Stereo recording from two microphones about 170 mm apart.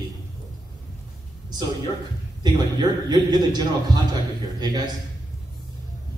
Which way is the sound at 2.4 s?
25° right (ahead or behind).